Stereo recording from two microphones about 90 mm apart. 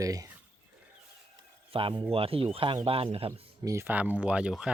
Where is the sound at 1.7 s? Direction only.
80° right.